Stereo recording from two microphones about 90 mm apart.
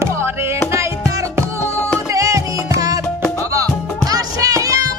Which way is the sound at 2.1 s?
35° right (ahead or behind).